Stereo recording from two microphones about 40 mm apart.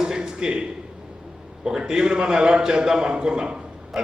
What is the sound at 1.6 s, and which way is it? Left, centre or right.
A man's voice, centre.